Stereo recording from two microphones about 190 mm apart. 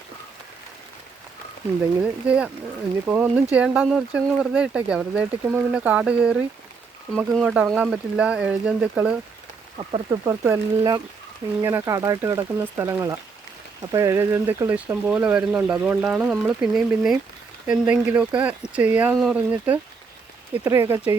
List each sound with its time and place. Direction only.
2.0 s speech: 5° right (ahead or behind)
9.7 s speech: 25° right (ahead or behind)
10.2 s speech: 15° right (ahead or behind)